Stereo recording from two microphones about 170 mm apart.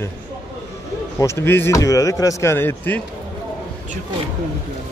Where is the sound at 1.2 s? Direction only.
15° left (ahead or behind).